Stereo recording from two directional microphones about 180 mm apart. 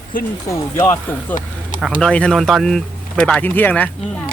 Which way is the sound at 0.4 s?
15° left (ahead or behind).